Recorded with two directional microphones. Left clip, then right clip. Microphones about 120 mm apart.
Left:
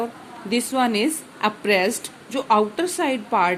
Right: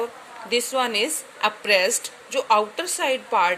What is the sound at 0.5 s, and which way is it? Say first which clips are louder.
A woman's voice: left 1 dB; 15° right (ahead or behind).